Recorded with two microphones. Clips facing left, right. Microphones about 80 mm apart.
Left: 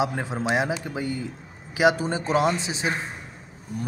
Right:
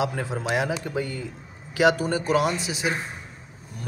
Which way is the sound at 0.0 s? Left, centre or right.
Left.